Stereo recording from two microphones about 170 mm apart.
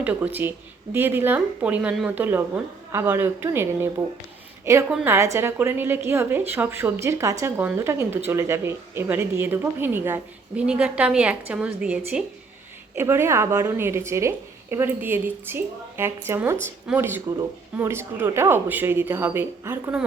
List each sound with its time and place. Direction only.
0.0 s a woman's voice: 10° right (ahead or behind)